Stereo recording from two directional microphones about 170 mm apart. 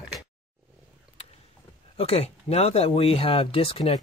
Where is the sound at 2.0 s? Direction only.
35° left (ahead or behind).